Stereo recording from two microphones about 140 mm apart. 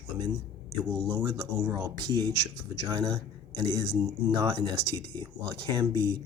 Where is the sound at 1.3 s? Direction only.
30° right (ahead or behind).